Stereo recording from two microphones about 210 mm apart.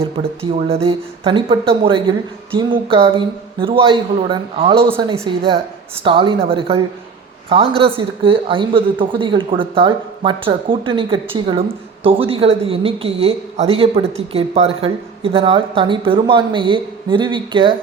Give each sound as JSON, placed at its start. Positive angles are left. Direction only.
{"t": 0.0, "sound": "speech", "side_deg": -30}